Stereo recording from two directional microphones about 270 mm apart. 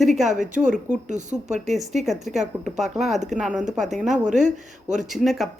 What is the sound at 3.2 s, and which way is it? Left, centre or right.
Speech, centre.